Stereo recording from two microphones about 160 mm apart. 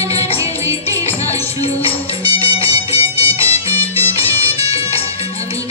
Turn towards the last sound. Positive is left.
turn(degrees=40)  # may be behind; listen again after turning